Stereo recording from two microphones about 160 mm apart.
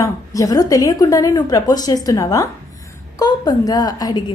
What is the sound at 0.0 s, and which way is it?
A woman's voice, 20° left (ahead or behind).